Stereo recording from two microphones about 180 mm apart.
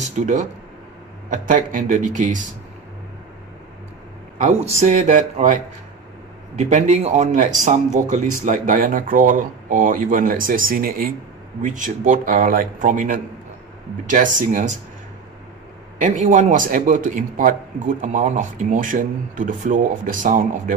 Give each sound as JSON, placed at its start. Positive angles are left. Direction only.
{"t": 0.0, "sound": "a man's voice", "side_deg": -40}
{"t": 4.4, "sound": "speech", "side_deg": -40}
{"t": 6.7, "sound": "a man's voice", "side_deg": -40}
{"t": 16.0, "sound": "a man's voice", "side_deg": -45}